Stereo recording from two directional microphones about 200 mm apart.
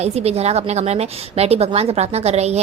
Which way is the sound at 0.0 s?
30° right (ahead or behind).